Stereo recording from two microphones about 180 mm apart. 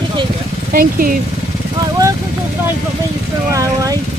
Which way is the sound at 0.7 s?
50° right (ahead or behind).